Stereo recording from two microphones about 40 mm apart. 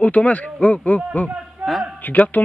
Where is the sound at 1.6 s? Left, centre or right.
Right.